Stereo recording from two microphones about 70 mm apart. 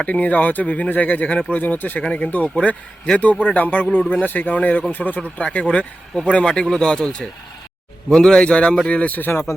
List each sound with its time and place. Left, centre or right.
0.0 s speech: left
5.4 s a man's voice: centre